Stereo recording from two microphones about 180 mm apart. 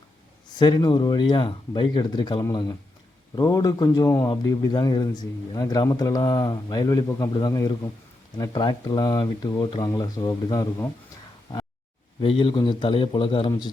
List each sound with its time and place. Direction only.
0.6 s a man's voice: 25° left (ahead or behind)
12.2 s a man's voice: 25° left (ahead or behind)